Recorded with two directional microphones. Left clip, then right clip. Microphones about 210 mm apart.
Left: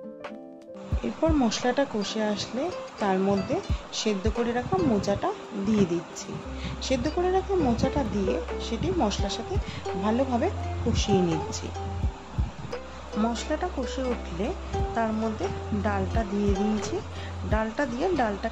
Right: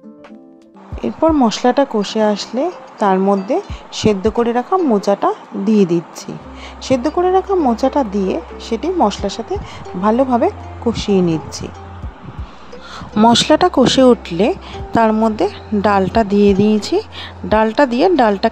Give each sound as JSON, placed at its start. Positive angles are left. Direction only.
{"t": 1.0, "sound": "speech", "side_deg": -35}
{"t": 13.2, "sound": "speech", "side_deg": -50}